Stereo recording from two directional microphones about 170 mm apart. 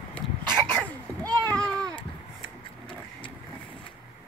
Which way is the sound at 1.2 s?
25° right (ahead or behind).